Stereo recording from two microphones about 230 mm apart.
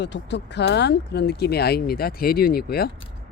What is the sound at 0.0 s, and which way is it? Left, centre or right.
Speech, left.